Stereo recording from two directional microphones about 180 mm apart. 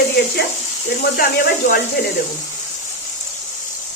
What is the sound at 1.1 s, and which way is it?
Speech, 55° left (ahead or behind).